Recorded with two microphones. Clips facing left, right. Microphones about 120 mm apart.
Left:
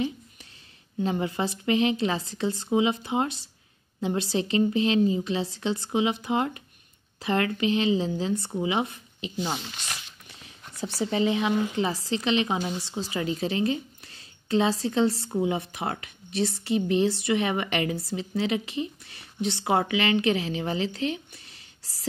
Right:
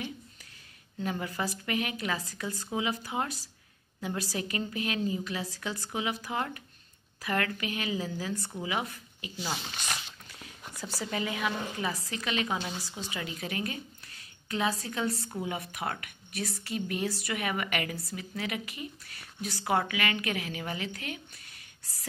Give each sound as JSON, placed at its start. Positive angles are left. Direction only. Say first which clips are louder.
{"t": 1.0, "sound": "a woman's voice", "louder": "left 6 dB", "side_deg": 25}
{"t": 10.8, "sound": "a woman's voice", "louder": "left 8 dB", "side_deg": 25}